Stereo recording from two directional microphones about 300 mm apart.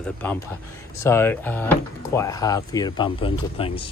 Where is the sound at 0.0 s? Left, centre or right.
Centre.